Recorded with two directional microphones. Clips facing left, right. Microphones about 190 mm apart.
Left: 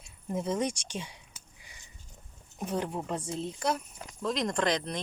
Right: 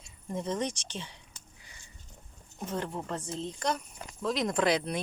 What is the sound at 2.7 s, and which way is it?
Speech, 10° left (ahead or behind).